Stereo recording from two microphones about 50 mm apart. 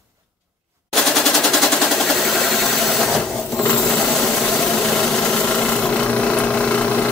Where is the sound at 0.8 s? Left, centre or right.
Centre.